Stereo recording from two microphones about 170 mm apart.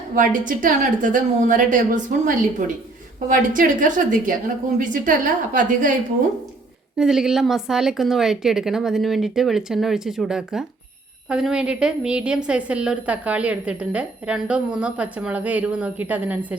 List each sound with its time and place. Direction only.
0.2 s a woman's voice: 50° right (ahead or behind)
6.9 s a woman's voice: 5° right (ahead or behind)